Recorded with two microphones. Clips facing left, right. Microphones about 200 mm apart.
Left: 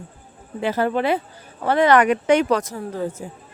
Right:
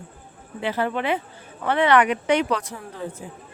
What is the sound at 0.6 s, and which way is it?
Speech, 40° left (ahead or behind).